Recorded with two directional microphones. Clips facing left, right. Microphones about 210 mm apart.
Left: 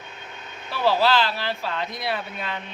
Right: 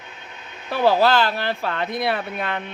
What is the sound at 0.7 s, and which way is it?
A woman's voice, 50° right (ahead or behind).